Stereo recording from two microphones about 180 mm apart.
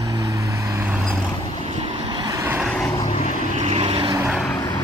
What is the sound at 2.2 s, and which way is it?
Vehicle, 20° right (ahead or behind).